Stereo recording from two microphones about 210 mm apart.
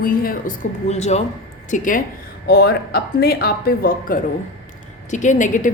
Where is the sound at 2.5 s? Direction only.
50° left (ahead or behind).